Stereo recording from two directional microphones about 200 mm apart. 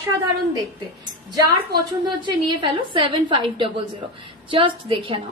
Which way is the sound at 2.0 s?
25° right (ahead or behind).